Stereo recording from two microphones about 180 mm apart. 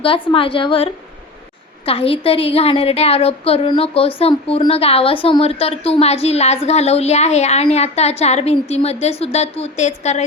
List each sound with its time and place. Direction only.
0.0 s a woman's voice: 30° left (ahead or behind)
1.9 s a woman's voice: 30° left (ahead or behind)